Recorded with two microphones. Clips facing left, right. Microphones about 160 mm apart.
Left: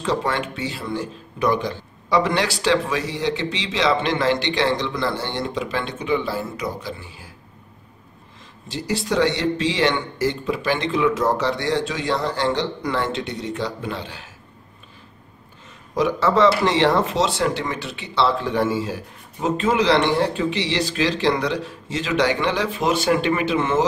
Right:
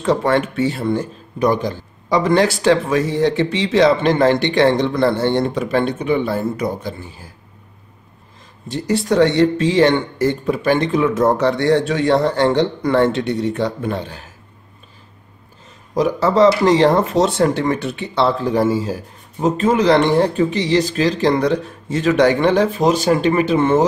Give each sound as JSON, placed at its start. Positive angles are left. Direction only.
{"t": 0.0, "sound": "speech", "side_deg": -55}
{"t": 8.6, "sound": "speech", "side_deg": -55}
{"t": 15.9, "sound": "speech", "side_deg": -40}